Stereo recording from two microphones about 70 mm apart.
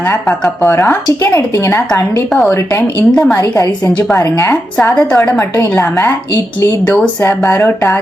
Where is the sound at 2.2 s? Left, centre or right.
Centre.